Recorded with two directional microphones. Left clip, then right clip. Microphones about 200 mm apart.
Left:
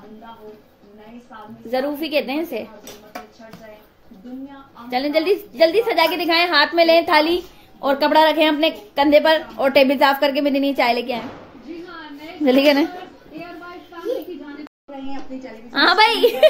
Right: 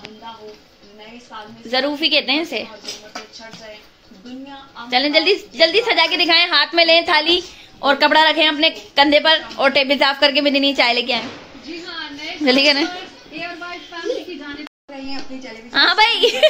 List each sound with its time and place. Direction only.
1.7 s a woman's voice: 5° left (ahead or behind)
4.8 s a woman's voice: 5° left (ahead or behind)
12.4 s a woman's voice: 15° left (ahead or behind)
15.3 s a woman's voice: 5° left (ahead or behind)